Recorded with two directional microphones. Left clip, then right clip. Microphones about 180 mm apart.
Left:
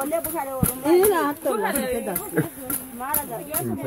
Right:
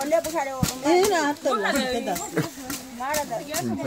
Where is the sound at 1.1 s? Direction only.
25° left (ahead or behind).